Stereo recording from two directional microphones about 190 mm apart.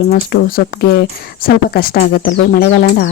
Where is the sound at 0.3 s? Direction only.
50° left (ahead or behind).